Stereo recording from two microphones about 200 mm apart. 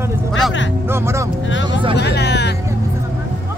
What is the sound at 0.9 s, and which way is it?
Speech, 15° right (ahead or behind).